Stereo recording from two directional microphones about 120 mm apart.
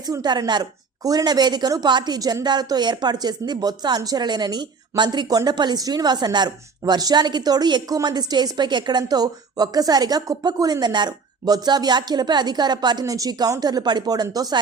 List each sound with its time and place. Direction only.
0.0 s a woman's voice: 35° right (ahead or behind)